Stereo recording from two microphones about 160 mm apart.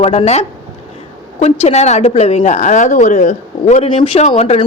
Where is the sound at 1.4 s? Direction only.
40° left (ahead or behind).